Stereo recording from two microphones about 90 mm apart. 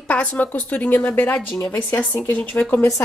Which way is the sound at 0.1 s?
15° left (ahead or behind).